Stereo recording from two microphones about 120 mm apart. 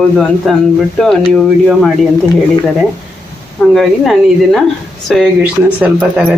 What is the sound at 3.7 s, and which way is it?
Speech, centre (ahead or behind).